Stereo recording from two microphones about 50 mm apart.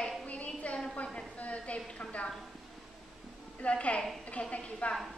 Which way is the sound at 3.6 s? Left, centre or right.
Left.